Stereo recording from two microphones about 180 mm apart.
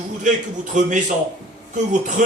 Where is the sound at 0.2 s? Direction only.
45° right (ahead or behind).